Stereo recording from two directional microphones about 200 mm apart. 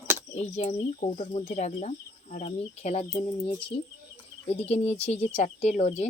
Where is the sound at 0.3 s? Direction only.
35° left (ahead or behind).